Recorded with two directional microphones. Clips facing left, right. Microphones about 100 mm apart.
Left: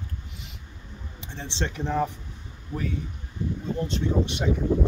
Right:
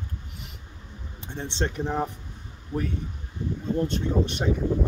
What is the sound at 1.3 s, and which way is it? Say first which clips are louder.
Speech: right 3 dB; 45° right (ahead or behind).